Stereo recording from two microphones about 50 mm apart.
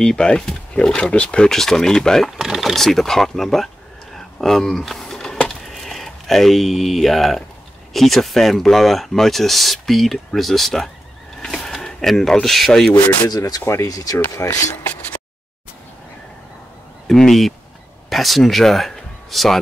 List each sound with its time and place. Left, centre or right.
0.0 s speech: centre
1.5 s speech: centre
2.3 s vehicle: centre
2.8 s speech: centre
4.4 s power windows: centre
5.7 s speech: centre
13.7 s speech: left
14.3 s speech: left
17.1 s speech: centre